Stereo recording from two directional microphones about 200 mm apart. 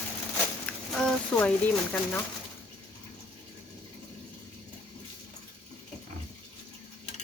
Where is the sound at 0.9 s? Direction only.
5° left (ahead or behind).